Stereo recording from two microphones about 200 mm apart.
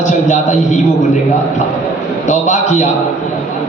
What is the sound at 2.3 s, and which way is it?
Speech, 35° left (ahead or behind).